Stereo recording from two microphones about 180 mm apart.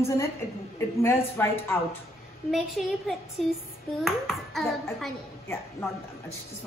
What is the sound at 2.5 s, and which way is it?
A child's voice, centre (ahead or behind).